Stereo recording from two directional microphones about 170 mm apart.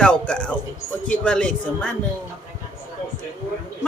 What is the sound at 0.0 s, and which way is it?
Music, 5° left (ahead or behind).